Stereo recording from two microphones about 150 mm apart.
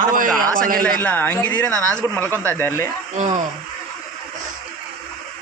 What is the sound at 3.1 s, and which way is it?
Speech, 55° right (ahead or behind).